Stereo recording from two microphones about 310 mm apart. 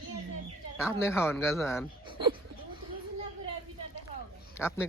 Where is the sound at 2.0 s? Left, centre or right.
Centre.